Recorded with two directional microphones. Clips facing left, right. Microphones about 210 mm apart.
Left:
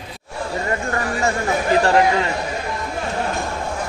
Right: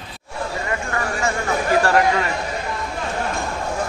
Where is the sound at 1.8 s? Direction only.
25° left (ahead or behind).